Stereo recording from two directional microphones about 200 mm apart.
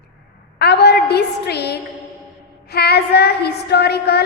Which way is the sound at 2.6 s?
50° left (ahead or behind).